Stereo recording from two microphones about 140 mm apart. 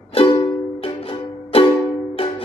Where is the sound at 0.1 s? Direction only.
35° left (ahead or behind).